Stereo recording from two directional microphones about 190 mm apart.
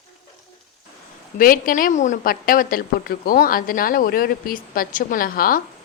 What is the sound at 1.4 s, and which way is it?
Speech, 45° left (ahead or behind).